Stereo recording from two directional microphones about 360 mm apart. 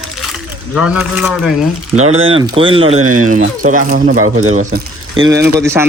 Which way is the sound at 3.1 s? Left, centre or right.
Right.